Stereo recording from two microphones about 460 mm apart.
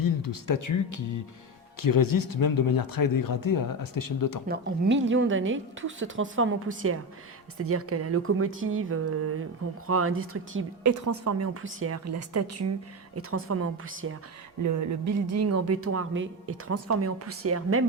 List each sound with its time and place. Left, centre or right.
0.0 s speech: left
4.4 s a woman's voice: right
14.6 s speech: right